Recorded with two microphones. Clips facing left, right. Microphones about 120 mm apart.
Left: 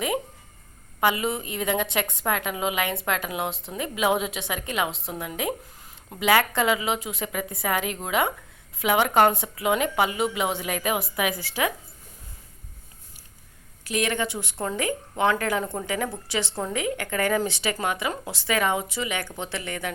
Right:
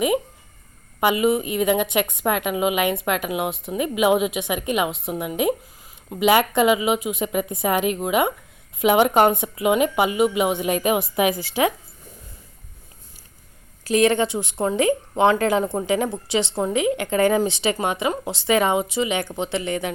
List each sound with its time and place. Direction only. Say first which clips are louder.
0.9 s a woman's voice: right 5 dB; 15° right (ahead or behind)
13.8 s speech: right 8 dB; 35° right (ahead or behind)